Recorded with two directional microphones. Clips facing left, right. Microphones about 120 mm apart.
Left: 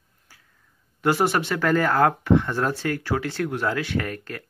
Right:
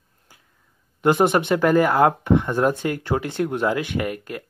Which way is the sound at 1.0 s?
20° right (ahead or behind).